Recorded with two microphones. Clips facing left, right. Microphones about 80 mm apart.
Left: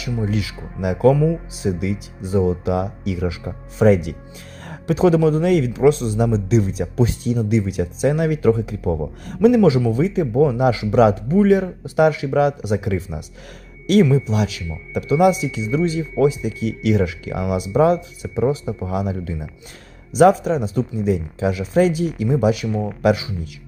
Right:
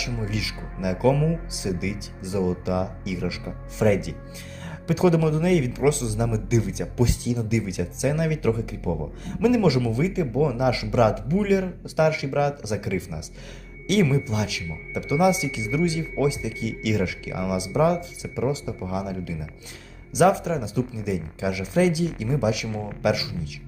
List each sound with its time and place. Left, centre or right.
0.3 s a man's voice: left
1.1 s speech: centre
1.5 s a man's voice: left